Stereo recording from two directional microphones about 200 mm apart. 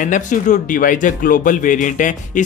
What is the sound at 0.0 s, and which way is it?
Speech, 40° left (ahead or behind).